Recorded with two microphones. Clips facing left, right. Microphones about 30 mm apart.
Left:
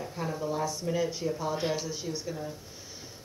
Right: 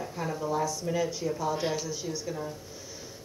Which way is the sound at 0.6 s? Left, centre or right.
Left.